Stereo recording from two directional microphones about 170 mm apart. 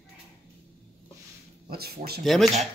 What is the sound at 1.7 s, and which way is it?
Speech, 65° right (ahead or behind).